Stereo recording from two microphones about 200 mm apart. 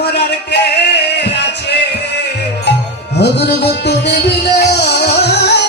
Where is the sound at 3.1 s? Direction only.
55° left (ahead or behind).